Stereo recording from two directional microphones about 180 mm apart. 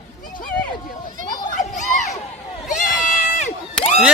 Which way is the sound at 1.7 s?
40° left (ahead or behind).